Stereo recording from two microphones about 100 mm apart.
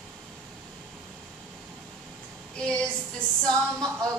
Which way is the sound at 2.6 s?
10° left (ahead or behind).